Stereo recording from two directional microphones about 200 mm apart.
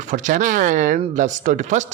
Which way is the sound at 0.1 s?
40° right (ahead or behind).